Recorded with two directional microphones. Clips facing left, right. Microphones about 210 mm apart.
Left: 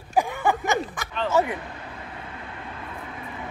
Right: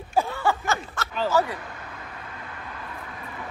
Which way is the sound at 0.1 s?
15° left (ahead or behind).